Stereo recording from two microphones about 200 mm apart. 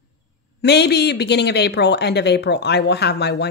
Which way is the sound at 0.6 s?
55° left (ahead or behind).